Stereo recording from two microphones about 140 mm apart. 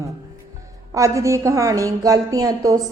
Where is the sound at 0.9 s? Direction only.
25° right (ahead or behind).